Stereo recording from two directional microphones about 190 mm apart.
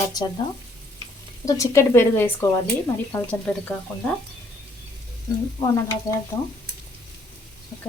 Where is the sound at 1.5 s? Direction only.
15° left (ahead or behind).